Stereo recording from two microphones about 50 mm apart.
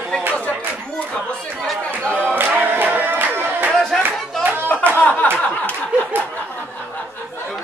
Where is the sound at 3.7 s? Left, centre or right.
Centre.